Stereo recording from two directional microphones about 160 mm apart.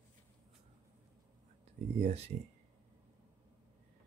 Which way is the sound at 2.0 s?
40° right (ahead or behind).